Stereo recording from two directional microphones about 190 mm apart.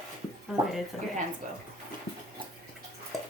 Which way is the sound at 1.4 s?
40° right (ahead or behind).